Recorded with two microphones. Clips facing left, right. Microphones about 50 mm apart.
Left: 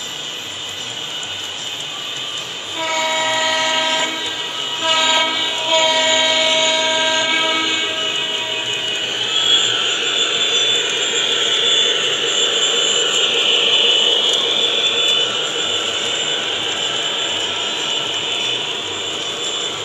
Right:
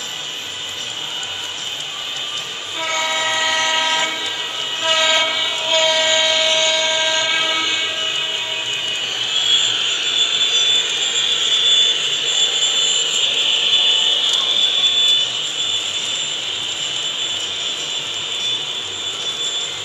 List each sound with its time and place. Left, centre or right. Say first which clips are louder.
2.8 s train: left 2 dB; centre
9.3 s vehicle: left 2 dB; centre; by 15.2 s left